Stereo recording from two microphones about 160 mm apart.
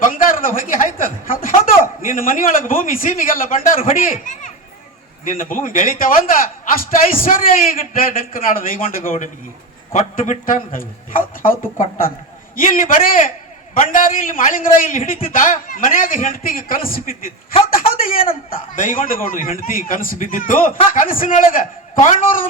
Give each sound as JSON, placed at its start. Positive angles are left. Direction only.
{"t": 0.0, "sound": "speech", "side_deg": 60}
{"t": 17.5, "sound": "speech", "side_deg": 35}
{"t": 18.0, "sound": "speech", "side_deg": 60}